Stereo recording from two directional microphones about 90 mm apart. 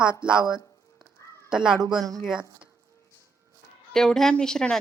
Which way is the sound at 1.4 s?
5° right (ahead or behind).